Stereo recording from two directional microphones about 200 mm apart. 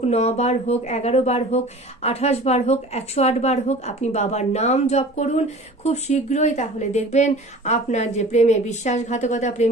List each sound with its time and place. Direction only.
0.0 s a woman's voice: 35° left (ahead or behind)